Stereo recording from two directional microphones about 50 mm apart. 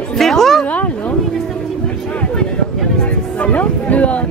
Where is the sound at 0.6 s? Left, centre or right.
Left.